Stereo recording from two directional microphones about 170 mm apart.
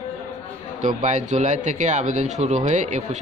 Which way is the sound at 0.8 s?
45° right (ahead or behind).